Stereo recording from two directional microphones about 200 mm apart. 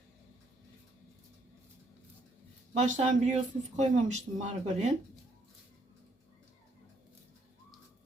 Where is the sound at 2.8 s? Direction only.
40° right (ahead or behind).